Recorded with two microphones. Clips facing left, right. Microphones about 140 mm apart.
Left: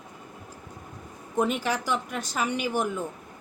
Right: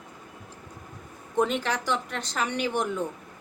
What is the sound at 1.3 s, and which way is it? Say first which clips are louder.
A woman's voice: even; 10° left (ahead or behind).